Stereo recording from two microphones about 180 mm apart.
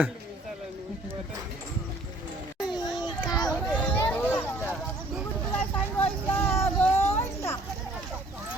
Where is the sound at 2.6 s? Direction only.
20° left (ahead or behind).